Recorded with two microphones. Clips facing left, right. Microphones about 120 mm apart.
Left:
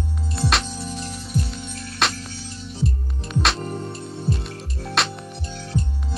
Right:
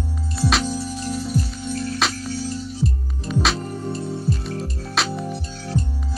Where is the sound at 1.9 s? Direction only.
Centre (ahead or behind).